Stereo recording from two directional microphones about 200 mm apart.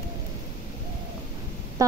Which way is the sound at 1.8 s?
15° right (ahead or behind).